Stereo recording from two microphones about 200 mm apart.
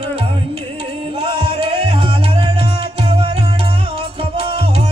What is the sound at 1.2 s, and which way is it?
Music, 25° right (ahead or behind).